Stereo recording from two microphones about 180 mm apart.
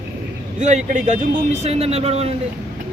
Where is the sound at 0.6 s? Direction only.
40° right (ahead or behind).